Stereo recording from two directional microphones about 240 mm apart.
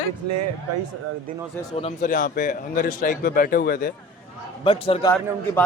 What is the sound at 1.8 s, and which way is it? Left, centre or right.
A man's voice, left.